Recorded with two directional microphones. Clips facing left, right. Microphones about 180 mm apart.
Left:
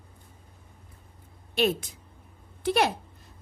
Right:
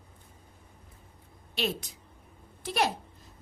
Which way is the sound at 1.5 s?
50° left (ahead or behind).